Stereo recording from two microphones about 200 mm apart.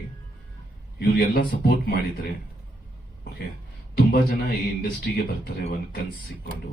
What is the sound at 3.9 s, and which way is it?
Speech, 50° left (ahead or behind).